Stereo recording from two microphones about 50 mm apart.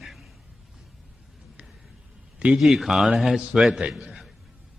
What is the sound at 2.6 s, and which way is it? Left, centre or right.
Speech, centre.